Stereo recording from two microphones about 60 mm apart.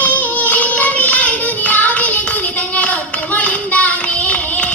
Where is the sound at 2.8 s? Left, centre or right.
Left.